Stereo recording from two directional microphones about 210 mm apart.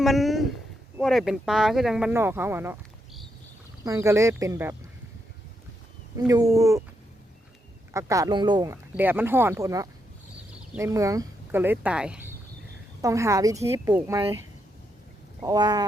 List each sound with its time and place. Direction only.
0.0 s speech: centre (ahead or behind)
3.8 s speech: 15° right (ahead or behind)
6.1 s speech: 15° right (ahead or behind)
7.9 s speech: 15° right (ahead or behind)
15.4 s speech: 20° right (ahead or behind)